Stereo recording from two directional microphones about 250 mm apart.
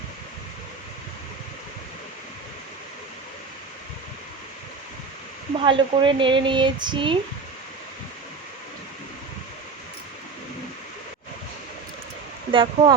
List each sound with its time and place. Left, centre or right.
5.6 s speech: centre
12.5 s speech: centre